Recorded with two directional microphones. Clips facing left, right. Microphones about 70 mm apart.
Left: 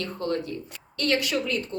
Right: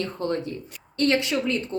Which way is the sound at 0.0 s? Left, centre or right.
Right.